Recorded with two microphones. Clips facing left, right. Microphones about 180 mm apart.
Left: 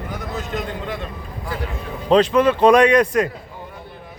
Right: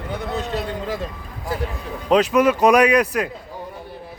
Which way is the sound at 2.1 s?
5° right (ahead or behind).